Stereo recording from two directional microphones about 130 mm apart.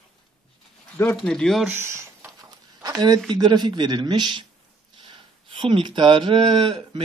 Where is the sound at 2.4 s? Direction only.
30° right (ahead or behind).